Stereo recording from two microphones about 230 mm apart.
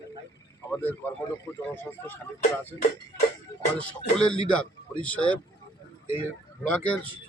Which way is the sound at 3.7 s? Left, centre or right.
Centre.